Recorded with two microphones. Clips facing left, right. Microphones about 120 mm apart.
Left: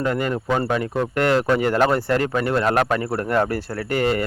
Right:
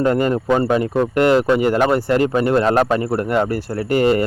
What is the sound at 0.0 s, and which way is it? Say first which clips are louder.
Speech: right 6 dB; 35° right (ahead or behind).